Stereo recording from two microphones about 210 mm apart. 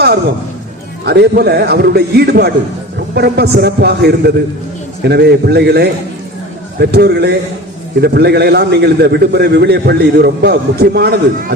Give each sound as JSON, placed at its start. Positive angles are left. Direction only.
{"t": 1.0, "sound": "a man's voice", "side_deg": -50}